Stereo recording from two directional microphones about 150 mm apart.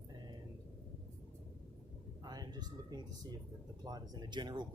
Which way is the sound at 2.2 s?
25° right (ahead or behind).